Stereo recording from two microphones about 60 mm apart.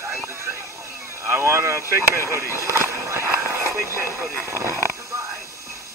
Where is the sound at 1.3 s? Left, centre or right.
Right.